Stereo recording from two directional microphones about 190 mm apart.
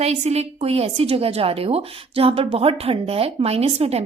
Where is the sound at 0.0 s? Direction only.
35° right (ahead or behind).